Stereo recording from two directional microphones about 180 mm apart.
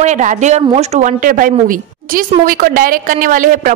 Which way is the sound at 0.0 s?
40° right (ahead or behind).